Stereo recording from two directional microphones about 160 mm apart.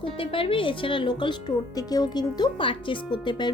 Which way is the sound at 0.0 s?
35° left (ahead or behind).